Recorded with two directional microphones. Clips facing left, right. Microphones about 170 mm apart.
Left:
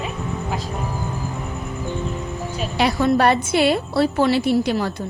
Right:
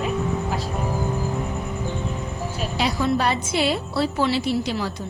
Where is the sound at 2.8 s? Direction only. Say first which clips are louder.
Left 5 dB; 60° left (ahead or behind).